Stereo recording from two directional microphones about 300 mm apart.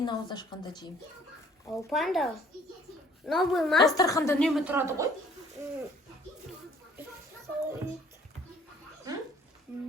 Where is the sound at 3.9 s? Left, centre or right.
Centre.